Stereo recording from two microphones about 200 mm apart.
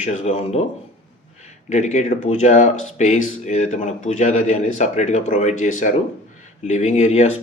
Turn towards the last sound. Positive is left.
turn(degrees=30)  # may be behind; listen again after turning